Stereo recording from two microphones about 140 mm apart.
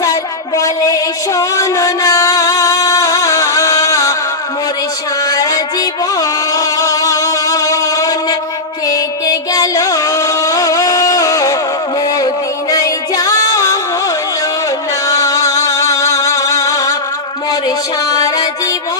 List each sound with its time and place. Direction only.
0.0 s music: 25° left (ahead or behind)
5.2 s music: 25° left (ahead or behind)
15.0 s music: 25° left (ahead or behind)